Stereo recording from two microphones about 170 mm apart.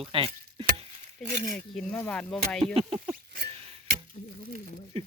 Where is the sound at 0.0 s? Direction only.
35° right (ahead or behind).